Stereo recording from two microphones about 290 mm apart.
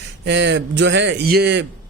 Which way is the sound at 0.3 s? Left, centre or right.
Right.